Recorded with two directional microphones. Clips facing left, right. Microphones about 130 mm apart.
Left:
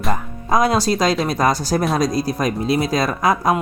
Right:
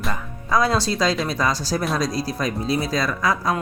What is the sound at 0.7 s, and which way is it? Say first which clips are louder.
Speech: left 4 dB; 40° left (ahead or behind).